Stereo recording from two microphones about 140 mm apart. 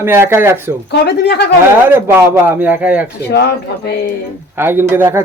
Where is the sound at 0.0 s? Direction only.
15° right (ahead or behind).